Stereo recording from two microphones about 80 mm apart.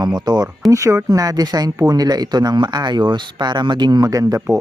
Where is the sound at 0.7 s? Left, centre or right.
Right.